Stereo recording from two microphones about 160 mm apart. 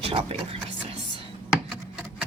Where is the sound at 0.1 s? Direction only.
35° right (ahead or behind).